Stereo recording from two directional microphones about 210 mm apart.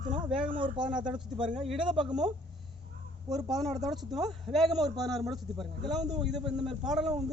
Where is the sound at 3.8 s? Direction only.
Centre (ahead or behind).